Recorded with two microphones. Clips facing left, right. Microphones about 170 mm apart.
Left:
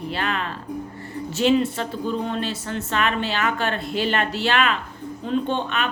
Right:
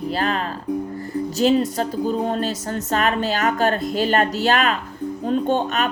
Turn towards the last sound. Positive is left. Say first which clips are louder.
# right 4 dB
turn(degrees=-40)  # may be behind; listen again after turning